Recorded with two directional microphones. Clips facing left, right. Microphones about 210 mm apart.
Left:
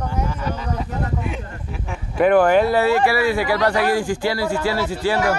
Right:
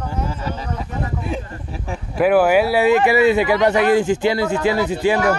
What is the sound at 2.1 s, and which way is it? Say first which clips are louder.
Speech: even; 5° right (ahead or behind).